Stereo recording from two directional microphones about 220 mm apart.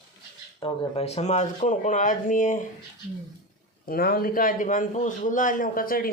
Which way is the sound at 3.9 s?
45° left (ahead or behind).